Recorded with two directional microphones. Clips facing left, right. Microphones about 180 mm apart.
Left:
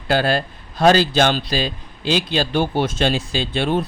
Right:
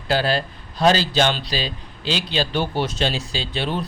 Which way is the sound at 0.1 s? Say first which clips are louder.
Left 2 dB; 50° left (ahead or behind).